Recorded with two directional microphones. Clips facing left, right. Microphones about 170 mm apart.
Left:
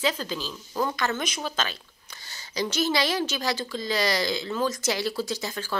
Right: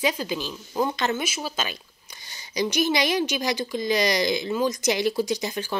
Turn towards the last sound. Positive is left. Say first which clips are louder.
# right 4 dB
turn(degrees=-15)  # may be behind; listen again after turning